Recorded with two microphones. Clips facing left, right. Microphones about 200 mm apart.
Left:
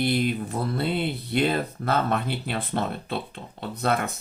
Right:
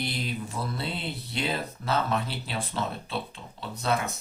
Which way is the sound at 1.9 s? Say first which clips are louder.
Left 2 dB; 55° left (ahead or behind).